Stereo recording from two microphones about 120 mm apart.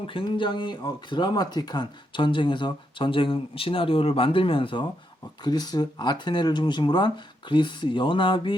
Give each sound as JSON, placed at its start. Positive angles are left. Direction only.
{"t": 0.1, "sound": "speech", "side_deg": 45}
{"t": 5.4, "sound": "speech", "side_deg": 35}